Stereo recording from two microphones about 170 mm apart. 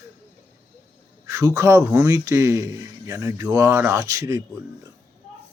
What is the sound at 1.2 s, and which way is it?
A man's voice, 20° right (ahead or behind).